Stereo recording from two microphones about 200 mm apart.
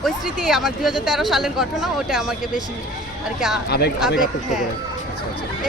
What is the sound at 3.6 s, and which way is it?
Speech, 55° left (ahead or behind).